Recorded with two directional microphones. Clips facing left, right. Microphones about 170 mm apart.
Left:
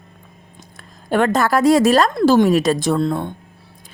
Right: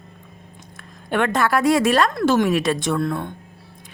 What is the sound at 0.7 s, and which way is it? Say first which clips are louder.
A woman's voice: left 4 dB; 35° left (ahead or behind).